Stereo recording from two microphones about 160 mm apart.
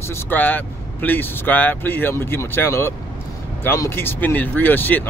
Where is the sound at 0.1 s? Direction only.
10° left (ahead or behind).